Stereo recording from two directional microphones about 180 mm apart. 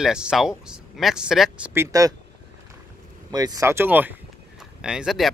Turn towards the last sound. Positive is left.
turn(degrees=0)  # may be behind; listen again after turning